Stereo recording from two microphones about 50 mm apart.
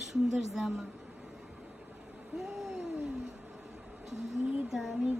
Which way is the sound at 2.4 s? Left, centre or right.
Centre.